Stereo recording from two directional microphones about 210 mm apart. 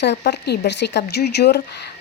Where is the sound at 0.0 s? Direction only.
55° left (ahead or behind).